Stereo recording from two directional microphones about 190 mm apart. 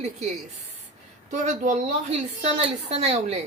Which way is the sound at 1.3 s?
40° right (ahead or behind).